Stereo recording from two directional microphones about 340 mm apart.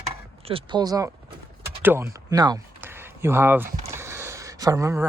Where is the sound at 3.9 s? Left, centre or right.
Centre.